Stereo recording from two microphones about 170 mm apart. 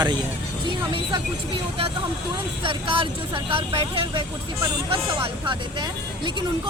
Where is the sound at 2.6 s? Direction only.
30° right (ahead or behind).